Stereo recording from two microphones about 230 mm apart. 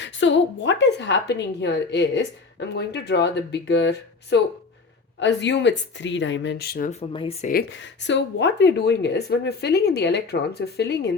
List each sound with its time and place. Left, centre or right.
0.0 s a woman's voice: left
7.1 s speech: left
7.7 s a woman's voice: left